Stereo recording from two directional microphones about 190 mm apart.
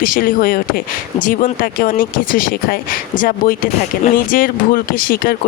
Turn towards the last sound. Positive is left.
turn(degrees=50)  # may be behind; listen again after turning